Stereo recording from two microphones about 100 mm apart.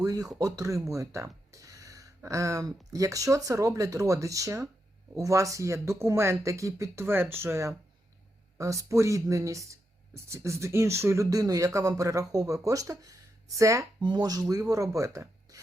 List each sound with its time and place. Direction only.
0.0 s speech: 40° right (ahead or behind)
14.0 s speech: 45° right (ahead or behind)